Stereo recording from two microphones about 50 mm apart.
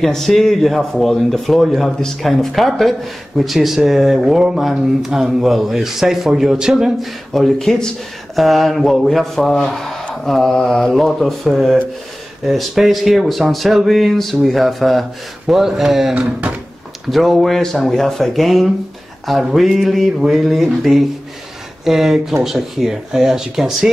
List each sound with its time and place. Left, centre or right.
0.0 s speech: centre
1.9 s speech: centre
7.5 s speech: centre
8.4 s speech: centre
15.4 s speech: centre
16.2 s speech: right
17.1 s speech: centre